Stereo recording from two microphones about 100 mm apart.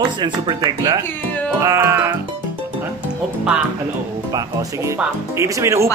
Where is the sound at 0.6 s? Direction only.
35° right (ahead or behind).